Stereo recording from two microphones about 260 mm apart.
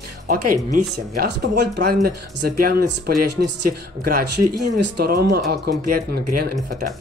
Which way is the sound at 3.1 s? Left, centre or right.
Right.